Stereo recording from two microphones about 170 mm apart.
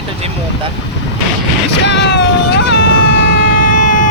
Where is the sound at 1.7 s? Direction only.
90° left.